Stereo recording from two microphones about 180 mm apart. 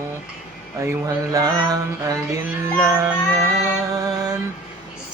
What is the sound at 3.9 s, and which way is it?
Music, 20° right (ahead or behind).